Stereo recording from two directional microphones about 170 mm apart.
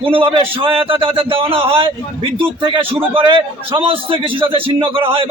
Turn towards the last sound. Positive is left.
turn(degrees=-30)  # may be behind; listen again after turning